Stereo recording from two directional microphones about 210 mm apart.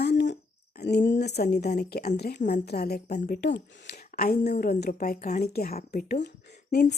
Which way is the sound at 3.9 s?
40° left (ahead or behind).